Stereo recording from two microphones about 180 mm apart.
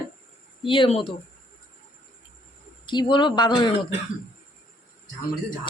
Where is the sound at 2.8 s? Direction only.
25° left (ahead or behind).